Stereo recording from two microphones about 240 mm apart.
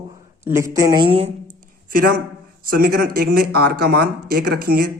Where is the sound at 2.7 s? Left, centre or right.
Right.